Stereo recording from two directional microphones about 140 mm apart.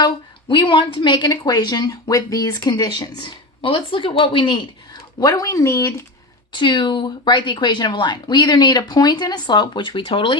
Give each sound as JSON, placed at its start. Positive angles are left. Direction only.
{"t": 0.0, "sound": "a woman's voice", "side_deg": 35}
{"t": 5.2, "sound": "speech", "side_deg": 25}
{"t": 6.5, "sound": "a woman's voice", "side_deg": 35}